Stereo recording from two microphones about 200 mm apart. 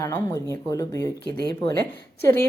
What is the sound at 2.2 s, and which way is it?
Speech, 10° left (ahead or behind).